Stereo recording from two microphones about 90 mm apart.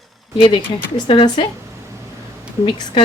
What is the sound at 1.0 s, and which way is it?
Speech, 70° left (ahead or behind).